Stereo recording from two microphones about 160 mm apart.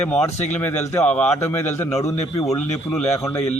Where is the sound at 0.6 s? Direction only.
10° left (ahead or behind).